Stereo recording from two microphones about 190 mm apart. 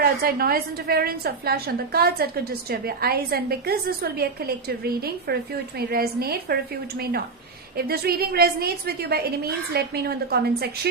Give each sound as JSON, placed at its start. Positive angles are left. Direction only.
{"t": 0.0, "sound": "a woman's voice", "side_deg": -55}
{"t": 7.8, "sound": "a woman's voice", "side_deg": -55}